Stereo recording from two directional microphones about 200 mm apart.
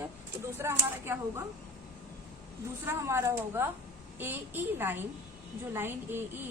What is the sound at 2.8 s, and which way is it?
A woman's voice, 15° right (ahead or behind).